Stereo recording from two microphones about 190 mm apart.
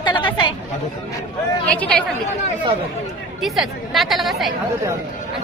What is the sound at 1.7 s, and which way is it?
Speech, 10° left (ahead or behind).